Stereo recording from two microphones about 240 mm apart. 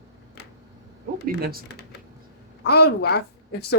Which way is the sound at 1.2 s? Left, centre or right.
Right.